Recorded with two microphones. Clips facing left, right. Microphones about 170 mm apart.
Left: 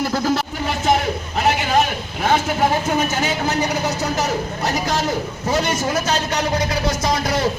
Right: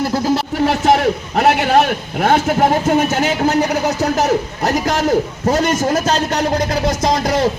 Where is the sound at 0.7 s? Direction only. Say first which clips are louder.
Right 4 dB; 65° right (ahead or behind).